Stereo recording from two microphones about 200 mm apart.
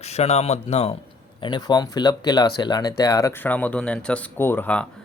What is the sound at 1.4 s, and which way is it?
Speech, 20° left (ahead or behind).